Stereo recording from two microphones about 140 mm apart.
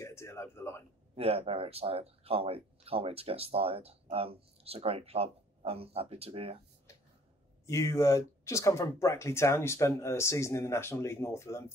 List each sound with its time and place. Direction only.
0.0 s a sound: 20° left (ahead or behind)
1.1 s speech: 45° right (ahead or behind)
7.6 s speech: 20° left (ahead or behind)